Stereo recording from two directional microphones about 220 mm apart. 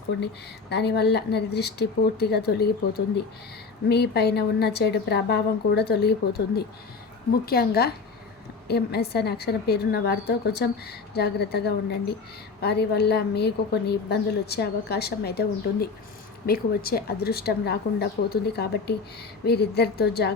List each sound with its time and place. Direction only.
0.1 s a woman's voice: 55° left (ahead or behind)
3.8 s a woman's voice: 50° left (ahead or behind)